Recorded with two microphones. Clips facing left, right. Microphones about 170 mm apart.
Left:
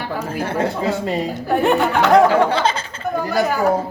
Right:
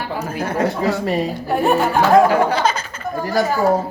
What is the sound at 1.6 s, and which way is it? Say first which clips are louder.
Speech: right 1 dB; 80° left.